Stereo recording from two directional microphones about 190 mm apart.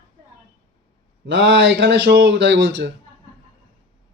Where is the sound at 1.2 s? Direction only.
70° right (ahead or behind).